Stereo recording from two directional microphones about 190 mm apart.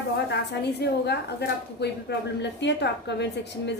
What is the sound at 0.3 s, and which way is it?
A woman's voice, 60° left (ahead or behind).